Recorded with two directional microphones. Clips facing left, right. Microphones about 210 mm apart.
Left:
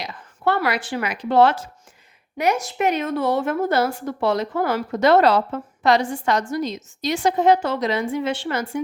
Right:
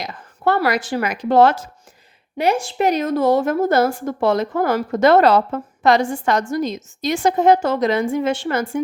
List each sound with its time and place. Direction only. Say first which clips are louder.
0.0 s a woman's voice: right 2 dB; 45° right (ahead or behind)
2.4 s a woman's voice: right 3 dB; 30° right (ahead or behind); by 8.8 s 50° right (ahead or behind)